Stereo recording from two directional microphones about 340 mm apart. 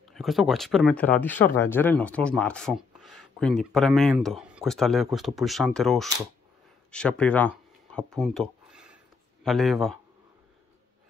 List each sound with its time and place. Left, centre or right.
0.1 s speech: centre